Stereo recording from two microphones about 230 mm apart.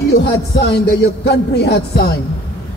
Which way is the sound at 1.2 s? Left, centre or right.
Left.